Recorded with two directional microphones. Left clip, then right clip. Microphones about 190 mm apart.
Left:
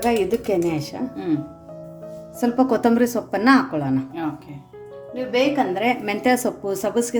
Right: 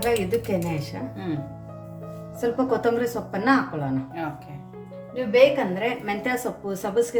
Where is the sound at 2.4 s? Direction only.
45° left (ahead or behind).